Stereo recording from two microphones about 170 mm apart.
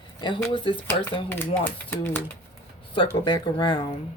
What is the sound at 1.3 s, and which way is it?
Speech, 10° left (ahead or behind).